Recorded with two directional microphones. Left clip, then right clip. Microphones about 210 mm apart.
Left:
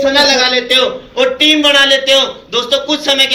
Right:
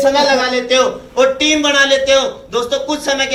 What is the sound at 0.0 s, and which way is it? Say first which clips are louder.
A man's voice: left 2 dB; 60° right (ahead or behind).